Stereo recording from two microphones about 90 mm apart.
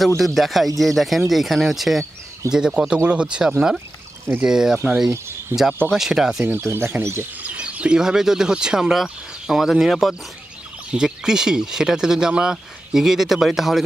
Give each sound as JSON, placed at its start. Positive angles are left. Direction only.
{"t": 0.2, "sound": "speech", "side_deg": 0}
{"t": 5.5, "sound": "speech", "side_deg": -25}
{"t": 5.9, "sound": "speech", "side_deg": -5}
{"t": 6.4, "sound": "speech", "side_deg": -25}
{"t": 7.4, "sound": "speech", "side_deg": -15}